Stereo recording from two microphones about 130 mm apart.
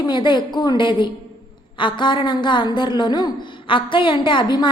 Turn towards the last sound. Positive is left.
turn(degrees=35)  # may be behind; listen again after turning